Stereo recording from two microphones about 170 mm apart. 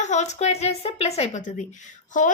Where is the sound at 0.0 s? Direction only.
45° left (ahead or behind).